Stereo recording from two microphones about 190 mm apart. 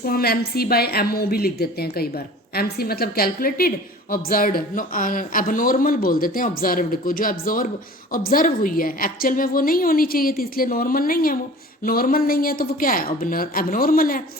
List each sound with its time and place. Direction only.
0.0 s speech: 55° left (ahead or behind)